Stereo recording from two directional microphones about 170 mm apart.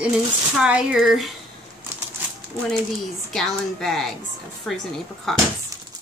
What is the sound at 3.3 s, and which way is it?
Speech, centre (ahead or behind).